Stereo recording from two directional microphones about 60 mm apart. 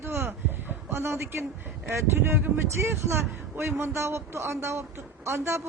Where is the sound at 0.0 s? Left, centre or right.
Right.